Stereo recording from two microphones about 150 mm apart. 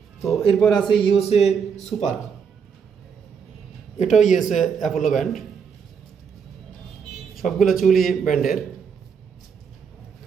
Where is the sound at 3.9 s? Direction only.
55° left (ahead or behind).